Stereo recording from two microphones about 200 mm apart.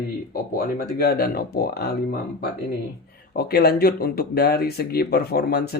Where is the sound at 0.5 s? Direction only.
50° left (ahead or behind).